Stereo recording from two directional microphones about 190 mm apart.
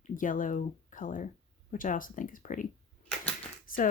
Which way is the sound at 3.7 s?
45° left (ahead or behind).